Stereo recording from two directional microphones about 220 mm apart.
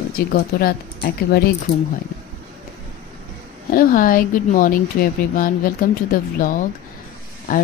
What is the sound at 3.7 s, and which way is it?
Speech, 40° left (ahead or behind).